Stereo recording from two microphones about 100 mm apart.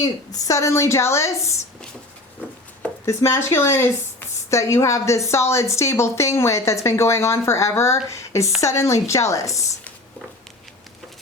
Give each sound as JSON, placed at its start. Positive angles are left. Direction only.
{"t": 0.0, "sound": "a woman's voice", "side_deg": 40}
{"t": 3.1, "sound": "a woman's voice", "side_deg": 30}